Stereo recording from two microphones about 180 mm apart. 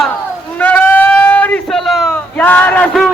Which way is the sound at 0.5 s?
10° left (ahead or behind).